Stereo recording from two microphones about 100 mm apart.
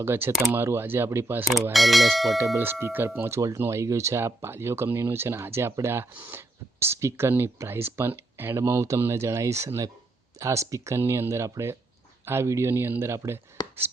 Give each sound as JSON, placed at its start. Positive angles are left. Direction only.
{"t": 0.0, "sound": "speech", "side_deg": -25}
{"t": 1.7, "sound": "speech", "side_deg": 0}
{"t": 2.6, "sound": "speech", "side_deg": -20}